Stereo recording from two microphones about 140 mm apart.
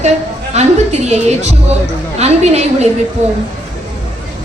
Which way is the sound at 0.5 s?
50° right (ahead or behind).